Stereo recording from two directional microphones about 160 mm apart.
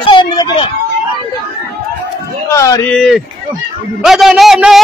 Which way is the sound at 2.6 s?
20° left (ahead or behind).